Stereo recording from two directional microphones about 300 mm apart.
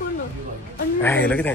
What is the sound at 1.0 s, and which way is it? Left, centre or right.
Speech, centre.